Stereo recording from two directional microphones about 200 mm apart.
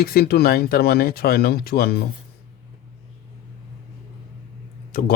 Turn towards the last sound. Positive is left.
turn(degrees=40)  # may be behind; listen again after turning